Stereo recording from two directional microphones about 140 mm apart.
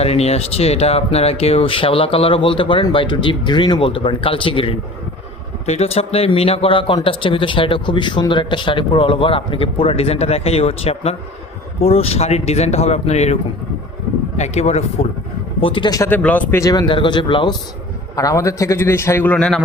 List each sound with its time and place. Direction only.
0.0 s speech: 45° left (ahead or behind)
15.6 s speech: 35° left (ahead or behind)
16.0 s speech: 15° left (ahead or behind)
16.6 s speech: 30° left (ahead or behind)
18.2 s a man's voice: 25° left (ahead or behind); by 19.6 s 5° left (ahead or behind)